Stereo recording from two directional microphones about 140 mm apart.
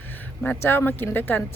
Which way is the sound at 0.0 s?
15° left (ahead or behind).